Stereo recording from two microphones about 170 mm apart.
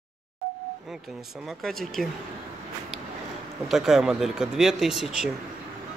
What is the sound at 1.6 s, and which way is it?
Speech, centre (ahead or behind).